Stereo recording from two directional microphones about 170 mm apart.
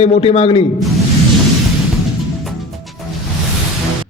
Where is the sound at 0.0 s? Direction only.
35° left (ahead or behind).